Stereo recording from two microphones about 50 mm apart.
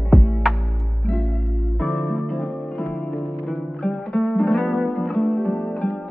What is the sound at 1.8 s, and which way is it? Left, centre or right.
Music, centre.